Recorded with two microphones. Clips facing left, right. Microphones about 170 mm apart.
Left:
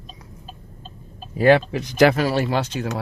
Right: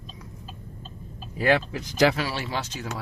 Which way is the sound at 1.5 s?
65° left (ahead or behind).